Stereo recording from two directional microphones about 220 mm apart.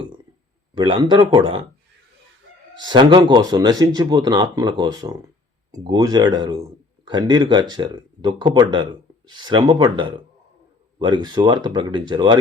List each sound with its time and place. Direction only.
0.8 s speech: 20° right (ahead or behind)
2.8 s speech: 20° right (ahead or behind)